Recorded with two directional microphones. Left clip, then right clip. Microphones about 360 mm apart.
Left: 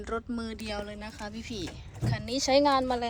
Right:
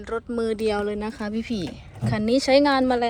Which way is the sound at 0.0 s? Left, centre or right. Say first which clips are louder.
Right 7 dB; centre.